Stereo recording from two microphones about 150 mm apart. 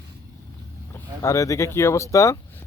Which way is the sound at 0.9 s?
20° left (ahead or behind).